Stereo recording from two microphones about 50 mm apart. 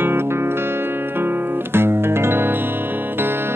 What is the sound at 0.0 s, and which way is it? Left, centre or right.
Music, right.